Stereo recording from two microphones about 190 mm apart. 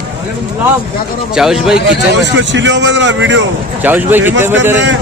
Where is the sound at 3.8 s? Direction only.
10° right (ahead or behind).